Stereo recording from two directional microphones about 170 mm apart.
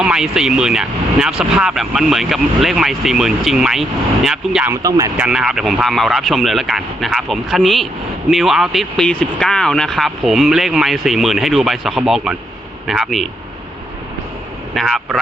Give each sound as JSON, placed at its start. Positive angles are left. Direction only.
{"t": 0.0, "sound": "speech", "side_deg": -5}
{"t": 4.7, "sound": "speech", "side_deg": -20}
{"t": 5.1, "sound": "speech", "side_deg": -5}
{"t": 14.8, "sound": "speech", "side_deg": 0}